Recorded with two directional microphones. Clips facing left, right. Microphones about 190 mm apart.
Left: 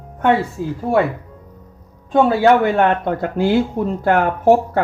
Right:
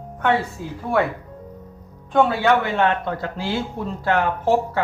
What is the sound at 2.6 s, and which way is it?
Speech, 55° left (ahead or behind).